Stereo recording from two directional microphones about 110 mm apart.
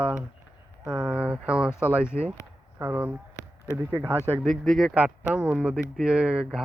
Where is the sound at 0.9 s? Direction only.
40° right (ahead or behind).